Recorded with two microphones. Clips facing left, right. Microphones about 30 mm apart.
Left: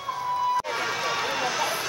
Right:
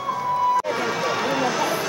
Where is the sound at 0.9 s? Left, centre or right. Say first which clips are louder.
Right 4 dB; centre.